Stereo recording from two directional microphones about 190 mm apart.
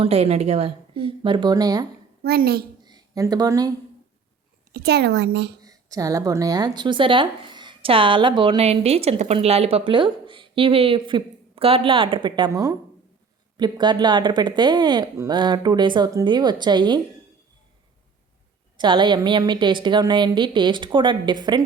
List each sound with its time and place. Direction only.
0.0 s a woman's voice: 35° right (ahead or behind)
2.2 s a woman's voice: 55° right (ahead or behind)
2.8 s speech: 20° right (ahead or behind)
4.7 s a woman's voice: 60° right (ahead or behind)
5.6 s a woman's voice: 20° right (ahead or behind)
18.8 s a woman's voice: 25° right (ahead or behind)